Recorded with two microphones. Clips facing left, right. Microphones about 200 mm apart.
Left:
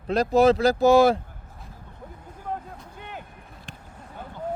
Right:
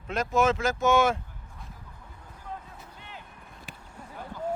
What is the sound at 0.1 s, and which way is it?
Speech, 35° left (ahead or behind).